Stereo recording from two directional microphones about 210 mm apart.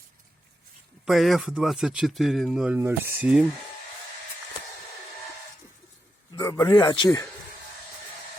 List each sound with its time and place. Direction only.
1.0 s speech: centre (ahead or behind)
6.3 s speech: 15° left (ahead or behind)